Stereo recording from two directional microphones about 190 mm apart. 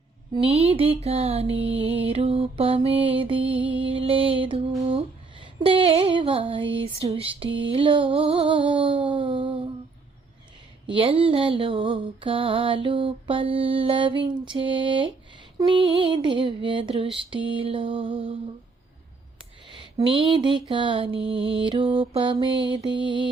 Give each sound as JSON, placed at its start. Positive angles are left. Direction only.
{"t": 0.3, "sound": "mantra", "side_deg": -30}
{"t": 1.0, "sound": "a sound", "side_deg": -30}
{"t": 2.0, "sound": "mantra", "side_deg": -30}
{"t": 4.9, "sound": "female singing", "side_deg": -30}
{"t": 10.8, "sound": "mantra", "side_deg": -25}
{"t": 19.6, "sound": "speech", "side_deg": -25}
{"t": 20.7, "sound": "mantra", "side_deg": -25}